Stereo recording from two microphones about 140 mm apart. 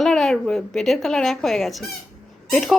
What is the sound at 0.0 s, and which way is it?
A woman's voice, centre (ahead or behind).